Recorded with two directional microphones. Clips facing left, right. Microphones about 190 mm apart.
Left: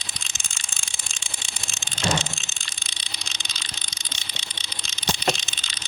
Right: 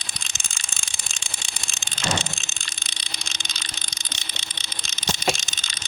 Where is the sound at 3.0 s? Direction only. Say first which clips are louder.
Right 2 dB; 50° right (ahead or behind).